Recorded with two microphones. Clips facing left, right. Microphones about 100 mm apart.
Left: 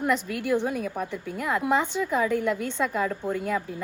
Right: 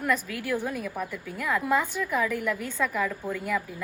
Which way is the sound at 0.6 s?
20° left (ahead or behind).